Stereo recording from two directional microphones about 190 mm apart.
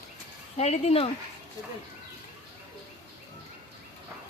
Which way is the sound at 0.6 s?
35° left (ahead or behind).